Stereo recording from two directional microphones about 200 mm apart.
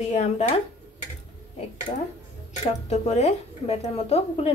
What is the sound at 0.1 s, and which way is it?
Speech, 35° left (ahead or behind).